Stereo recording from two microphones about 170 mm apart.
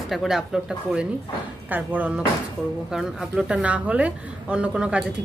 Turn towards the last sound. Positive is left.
turn(degrees=-5)  # may be behind; listen again after turning